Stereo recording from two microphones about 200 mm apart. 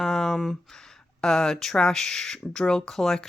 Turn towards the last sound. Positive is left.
turn(degrees=0)  # may be behind; listen again after turning